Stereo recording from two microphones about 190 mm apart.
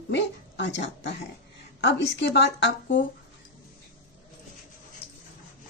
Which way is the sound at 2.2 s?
70° left (ahead or behind).